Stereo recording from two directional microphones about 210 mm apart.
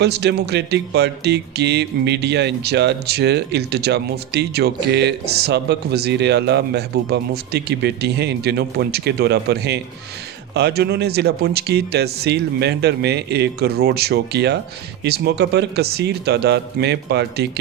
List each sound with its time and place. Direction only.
0.0 s speech: 55° right (ahead or behind)